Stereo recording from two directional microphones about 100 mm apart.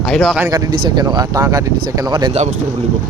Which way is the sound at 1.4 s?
35° right (ahead or behind).